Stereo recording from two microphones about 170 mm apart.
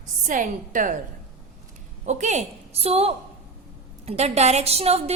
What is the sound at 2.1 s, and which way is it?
A woman's voice, 45° right (ahead or behind).